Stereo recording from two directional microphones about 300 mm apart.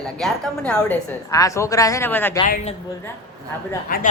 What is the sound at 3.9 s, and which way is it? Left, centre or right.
Speech, left.